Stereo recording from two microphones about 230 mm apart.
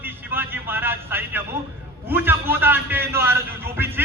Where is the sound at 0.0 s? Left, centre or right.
Centre.